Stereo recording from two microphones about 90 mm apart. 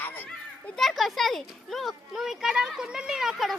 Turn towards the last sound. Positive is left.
turn(degrees=0)  # may be behind; listen again after turning